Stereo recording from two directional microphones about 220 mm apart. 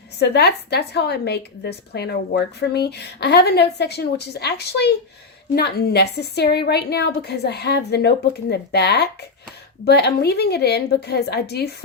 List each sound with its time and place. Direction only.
0.2 s a woman's voice: 50° left (ahead or behind)